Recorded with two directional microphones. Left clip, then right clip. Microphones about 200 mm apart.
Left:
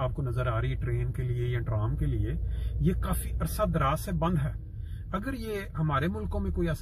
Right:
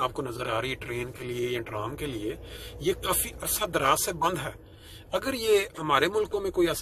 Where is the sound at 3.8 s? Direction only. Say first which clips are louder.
Right 5 dB; 10° right (ahead or behind).